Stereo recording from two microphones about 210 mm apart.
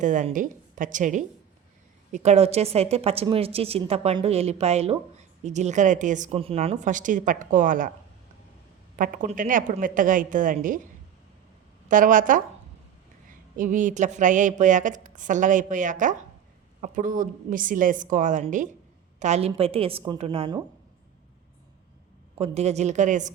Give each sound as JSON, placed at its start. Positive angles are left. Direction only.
{"t": 0.0, "sound": "a woman's voice", "side_deg": -35}
{"t": 9.0, "sound": "a woman's voice", "side_deg": -40}
{"t": 11.9, "sound": "a woman's voice", "side_deg": -40}
{"t": 13.6, "sound": "a woman's voice", "side_deg": -40}
{"t": 22.4, "sound": "a woman's voice", "side_deg": -30}